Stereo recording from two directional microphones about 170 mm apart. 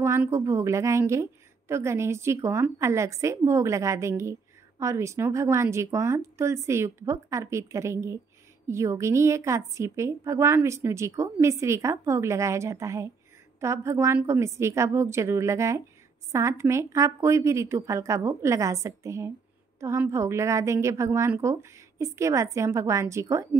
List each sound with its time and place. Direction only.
0.0 s a woman's voice: 15° right (ahead or behind)